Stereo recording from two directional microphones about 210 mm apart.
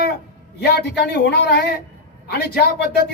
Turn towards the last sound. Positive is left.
turn(degrees=50)  # may be behind; listen again after turning